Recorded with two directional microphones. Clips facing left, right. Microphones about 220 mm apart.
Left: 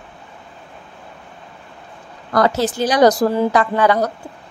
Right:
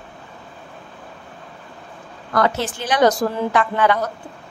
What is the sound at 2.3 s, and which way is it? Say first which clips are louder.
A woman's voice: left 4 dB; 35° left (ahead or behind).